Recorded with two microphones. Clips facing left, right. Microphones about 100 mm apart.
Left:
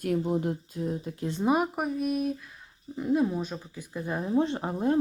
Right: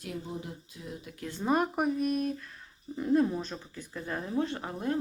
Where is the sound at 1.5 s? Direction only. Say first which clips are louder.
Right 3 dB; 5° left (ahead or behind).